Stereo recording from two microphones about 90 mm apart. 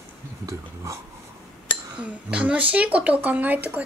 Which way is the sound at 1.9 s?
15° right (ahead or behind).